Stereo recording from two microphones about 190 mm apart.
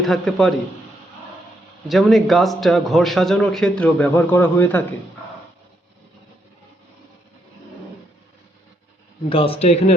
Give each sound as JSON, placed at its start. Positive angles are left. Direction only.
{"t": 0.0, "sound": "a man's voice", "side_deg": 0}
{"t": 1.9, "sound": "a man's voice", "side_deg": 0}
{"t": 9.3, "sound": "a man's voice", "side_deg": 30}